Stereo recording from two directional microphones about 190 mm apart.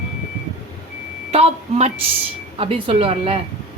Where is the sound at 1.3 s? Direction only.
35° right (ahead or behind).